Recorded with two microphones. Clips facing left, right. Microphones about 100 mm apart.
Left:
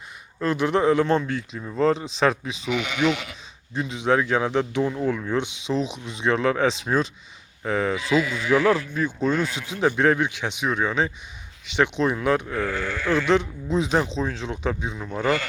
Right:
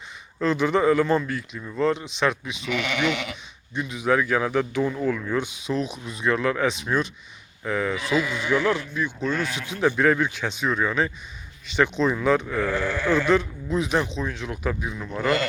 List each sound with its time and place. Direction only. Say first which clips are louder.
0.3 s speech: even; 10° left (ahead or behind); by 2.6 s 35° left (ahead or behind)
2.7 s speech: right 1 dB; 65° right (ahead or behind)
3.0 s speech: left 4 dB; centre (ahead or behind)
3.8 s speech: left 1 dB; 25° left (ahead or behind)
12.5 s speech: right 2 dB; 15° right (ahead or behind)
13.2 s speech: even; 20° left (ahead or behind)